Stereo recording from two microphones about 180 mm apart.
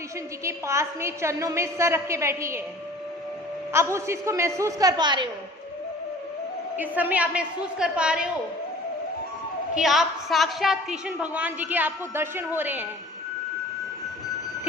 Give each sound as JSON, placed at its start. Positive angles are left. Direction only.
{"t": 0.4, "sound": "a woman's voice", "side_deg": -15}
{"t": 3.7, "sound": "a woman's voice", "side_deg": -15}
{"t": 6.7, "sound": "a woman's voice", "side_deg": -10}
{"t": 9.7, "sound": "a woman's voice", "side_deg": 0}